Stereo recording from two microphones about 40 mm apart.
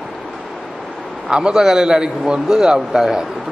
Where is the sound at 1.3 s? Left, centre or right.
Right.